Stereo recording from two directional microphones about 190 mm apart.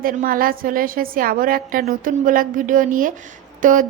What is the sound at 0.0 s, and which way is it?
A woman's voice, 45° right (ahead or behind).